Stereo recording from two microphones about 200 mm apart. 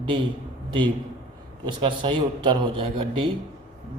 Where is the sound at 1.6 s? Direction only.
25° right (ahead or behind).